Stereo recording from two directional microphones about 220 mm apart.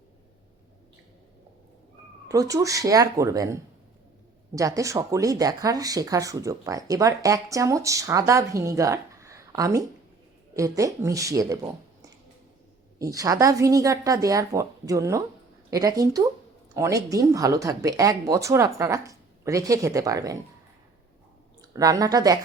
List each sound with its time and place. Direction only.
2.2 s a woman's voice: 15° right (ahead or behind)
21.6 s speech: 15° right (ahead or behind)